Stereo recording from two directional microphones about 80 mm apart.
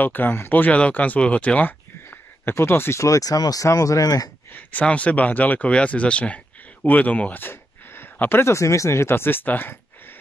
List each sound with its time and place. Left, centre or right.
0.0 s speech: left
4.5 s speech: left